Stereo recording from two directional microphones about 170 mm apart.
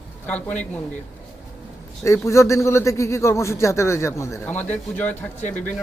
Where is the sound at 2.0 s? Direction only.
15° left (ahead or behind).